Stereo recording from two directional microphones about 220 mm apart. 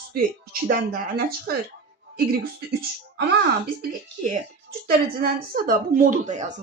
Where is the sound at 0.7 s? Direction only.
45° right (ahead or behind).